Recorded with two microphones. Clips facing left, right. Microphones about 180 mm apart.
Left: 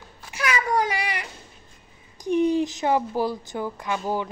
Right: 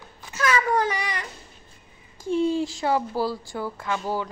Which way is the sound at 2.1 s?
15° left (ahead or behind).